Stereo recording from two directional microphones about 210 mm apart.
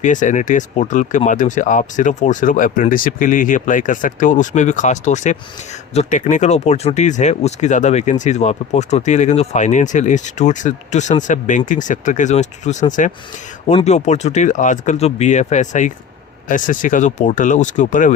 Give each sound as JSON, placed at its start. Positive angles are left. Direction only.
{"t": 0.0, "sound": "speech", "side_deg": 35}